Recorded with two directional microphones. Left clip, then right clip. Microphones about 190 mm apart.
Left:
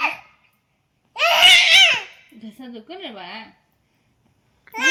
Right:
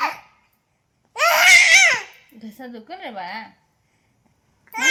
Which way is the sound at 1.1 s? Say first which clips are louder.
Even; 15° right (ahead or behind).